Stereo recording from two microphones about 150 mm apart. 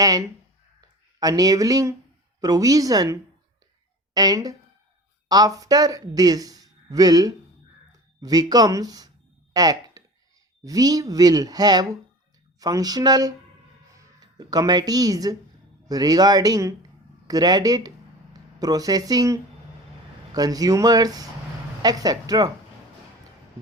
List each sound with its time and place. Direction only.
0.0 s speech: 25° right (ahead or behind)
9.5 s a sound: 25° right (ahead or behind)
10.6 s speech: 25° right (ahead or behind)